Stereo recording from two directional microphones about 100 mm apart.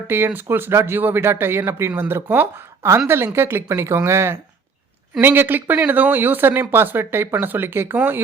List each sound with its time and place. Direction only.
0.3 s speech: 20° right (ahead or behind)